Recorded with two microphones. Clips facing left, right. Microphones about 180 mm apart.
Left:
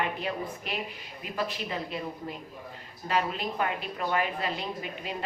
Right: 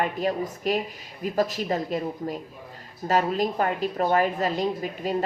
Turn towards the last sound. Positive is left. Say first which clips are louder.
# right 8 dB
turn(degrees=-40)  # may be behind; listen again after turning